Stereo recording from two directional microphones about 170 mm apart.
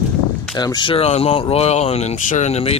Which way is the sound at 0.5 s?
25° left (ahead or behind).